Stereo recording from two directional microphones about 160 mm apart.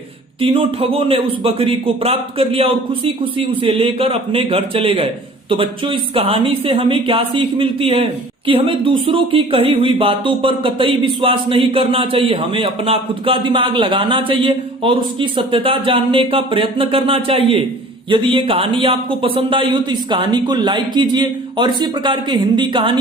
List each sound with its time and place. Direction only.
0.5 s speech: 35° right (ahead or behind)